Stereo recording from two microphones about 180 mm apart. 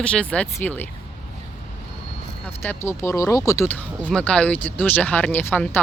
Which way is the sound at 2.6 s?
15° left (ahead or behind).